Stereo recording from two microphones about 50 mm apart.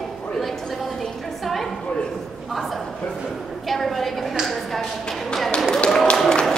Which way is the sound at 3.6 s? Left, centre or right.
Centre.